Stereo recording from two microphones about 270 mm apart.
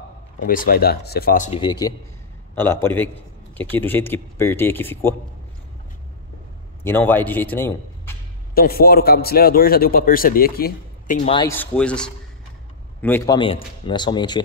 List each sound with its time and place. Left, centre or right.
0.4 s a man's voice: left
1.6 s speech: centre
6.8 s a man's voice: centre
8.5 s a man's voice: left
11.2 s speech: centre
11.5 s speech: centre